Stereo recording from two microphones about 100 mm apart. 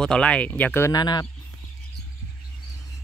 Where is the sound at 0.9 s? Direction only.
45° left (ahead or behind).